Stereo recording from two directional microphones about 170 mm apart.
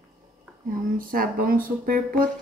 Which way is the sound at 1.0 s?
55° right (ahead or behind).